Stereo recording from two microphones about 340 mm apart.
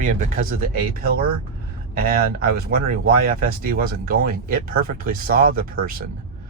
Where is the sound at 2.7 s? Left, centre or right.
Right.